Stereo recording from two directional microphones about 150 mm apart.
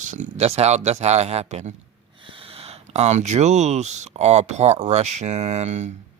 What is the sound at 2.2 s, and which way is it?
Speech, 35° right (ahead or behind).